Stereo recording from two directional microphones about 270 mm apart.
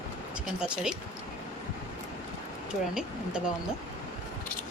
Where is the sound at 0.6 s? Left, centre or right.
Centre.